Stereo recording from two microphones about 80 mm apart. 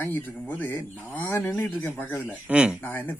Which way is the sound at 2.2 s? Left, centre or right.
Centre.